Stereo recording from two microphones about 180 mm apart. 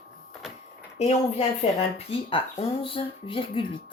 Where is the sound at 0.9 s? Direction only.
35° left (ahead or behind).